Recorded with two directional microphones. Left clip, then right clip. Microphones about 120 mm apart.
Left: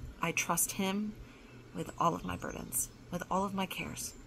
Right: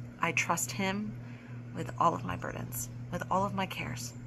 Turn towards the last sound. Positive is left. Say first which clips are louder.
# right 2 dB
turn(degrees=25)  # may be behind; listen again after turning